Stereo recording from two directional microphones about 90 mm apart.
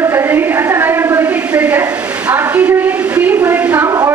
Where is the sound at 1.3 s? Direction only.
15° right (ahead or behind).